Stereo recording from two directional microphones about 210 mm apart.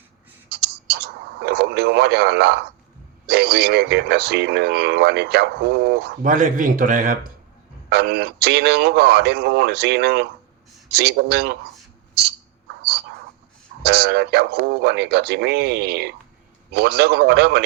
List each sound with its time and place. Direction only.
0.5 s radio: 50° right (ahead or behind)
3.2 s speech: 50° right (ahead or behind)
7.9 s speech: 50° right (ahead or behind)
13.8 s speech: 50° right (ahead or behind)